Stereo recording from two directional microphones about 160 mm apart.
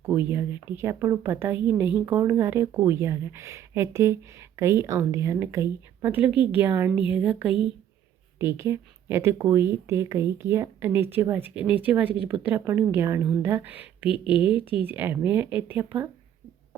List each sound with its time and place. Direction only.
0.0 s speech: 15° right (ahead or behind)